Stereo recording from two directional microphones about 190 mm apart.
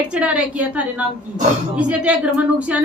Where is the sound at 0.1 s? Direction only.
5° right (ahead or behind).